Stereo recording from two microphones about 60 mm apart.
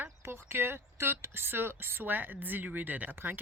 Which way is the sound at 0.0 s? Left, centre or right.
Right.